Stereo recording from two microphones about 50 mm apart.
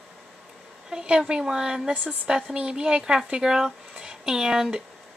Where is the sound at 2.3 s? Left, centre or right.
Centre.